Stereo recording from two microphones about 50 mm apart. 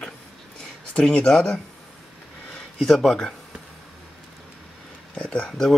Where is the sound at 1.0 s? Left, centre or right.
Left.